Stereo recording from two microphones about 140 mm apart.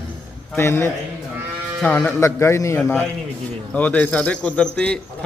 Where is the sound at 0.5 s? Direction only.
20° left (ahead or behind).